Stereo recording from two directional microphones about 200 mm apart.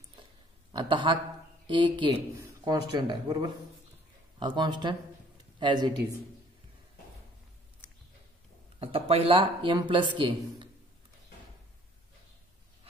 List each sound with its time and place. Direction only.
0.2 s a sound: 25° right (ahead or behind)
1.7 s a man's voice: 25° right (ahead or behind)
8.7 s speech: 30° right (ahead or behind)